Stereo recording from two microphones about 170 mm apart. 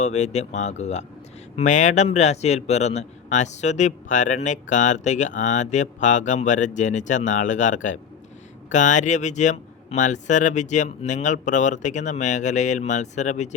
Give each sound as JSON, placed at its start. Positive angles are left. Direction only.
{"t": 0.0, "sound": "speech", "side_deg": 40}